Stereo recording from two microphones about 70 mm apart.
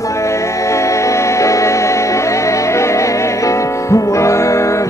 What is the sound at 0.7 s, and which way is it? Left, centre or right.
Music, left.